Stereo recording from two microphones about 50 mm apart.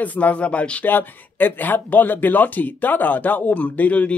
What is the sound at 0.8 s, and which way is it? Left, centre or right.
Speech, left.